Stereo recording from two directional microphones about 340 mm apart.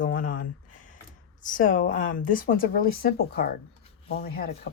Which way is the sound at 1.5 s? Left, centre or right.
Left.